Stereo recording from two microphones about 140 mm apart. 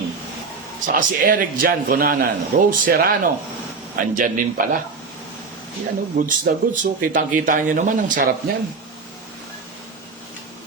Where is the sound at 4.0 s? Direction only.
70° right (ahead or behind).